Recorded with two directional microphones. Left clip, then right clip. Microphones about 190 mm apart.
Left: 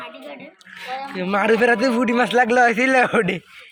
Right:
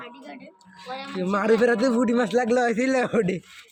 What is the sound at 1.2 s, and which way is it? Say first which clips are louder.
A man's voice: left 3 dB; 5° left (ahead or behind).